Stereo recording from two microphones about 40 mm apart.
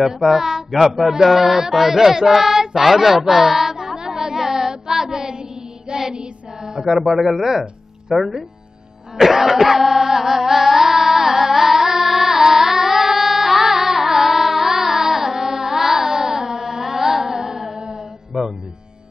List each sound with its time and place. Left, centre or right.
0.0 s speech: centre
5.9 s child singing: centre
7.0 s a man's voice: centre
9.2 s a sound: centre
18.3 s music: centre